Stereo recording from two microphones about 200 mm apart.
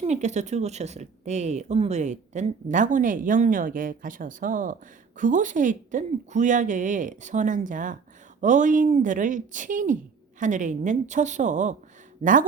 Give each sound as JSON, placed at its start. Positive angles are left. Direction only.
{"t": 0.0, "sound": "speech", "side_deg": -35}